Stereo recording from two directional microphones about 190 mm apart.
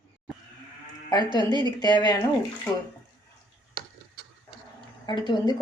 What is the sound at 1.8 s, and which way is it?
Speech, 20° left (ahead or behind).